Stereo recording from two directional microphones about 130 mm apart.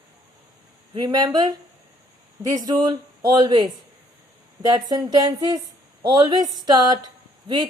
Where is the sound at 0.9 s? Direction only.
35° right (ahead or behind).